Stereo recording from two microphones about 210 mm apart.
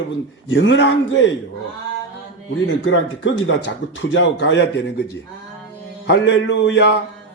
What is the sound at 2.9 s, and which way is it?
Speech, 65° left (ahead or behind).